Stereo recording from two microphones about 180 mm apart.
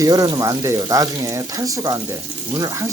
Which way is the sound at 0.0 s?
20° right (ahead or behind).